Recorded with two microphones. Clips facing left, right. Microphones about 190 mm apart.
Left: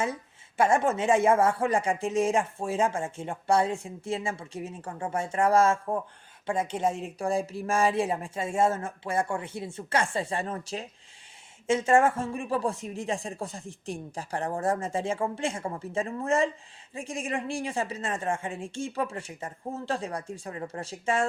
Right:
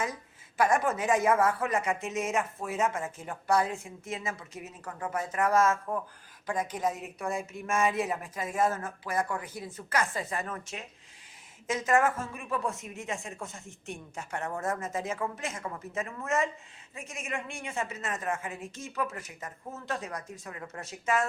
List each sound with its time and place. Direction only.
0.0 s speech: 25° left (ahead or behind)